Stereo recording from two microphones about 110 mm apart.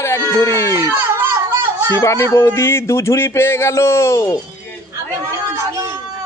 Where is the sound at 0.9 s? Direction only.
25° right (ahead or behind).